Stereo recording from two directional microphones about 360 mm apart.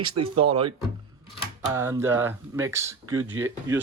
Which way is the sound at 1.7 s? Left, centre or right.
Centre.